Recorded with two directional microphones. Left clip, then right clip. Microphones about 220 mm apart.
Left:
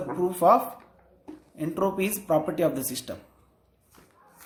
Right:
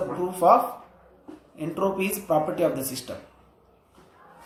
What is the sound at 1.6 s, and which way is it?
Speech, 55° left (ahead or behind).